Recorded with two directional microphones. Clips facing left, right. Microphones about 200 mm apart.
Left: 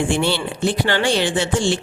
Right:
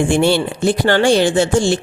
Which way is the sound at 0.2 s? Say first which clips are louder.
Right 5 dB; 45° right (ahead or behind).